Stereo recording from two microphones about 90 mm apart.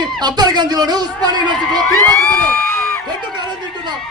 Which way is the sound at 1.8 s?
25° left (ahead or behind).